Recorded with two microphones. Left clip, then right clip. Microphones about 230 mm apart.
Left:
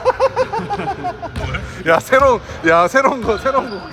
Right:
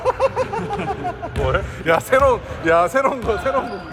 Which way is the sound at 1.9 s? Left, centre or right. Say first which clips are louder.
Left 3 dB; left.